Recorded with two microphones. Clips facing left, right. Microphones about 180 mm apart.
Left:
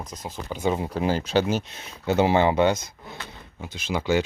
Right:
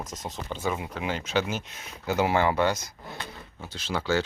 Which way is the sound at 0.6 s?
30° left (ahead or behind).